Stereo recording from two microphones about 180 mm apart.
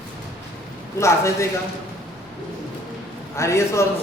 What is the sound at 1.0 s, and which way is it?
Speech, 15° left (ahead or behind).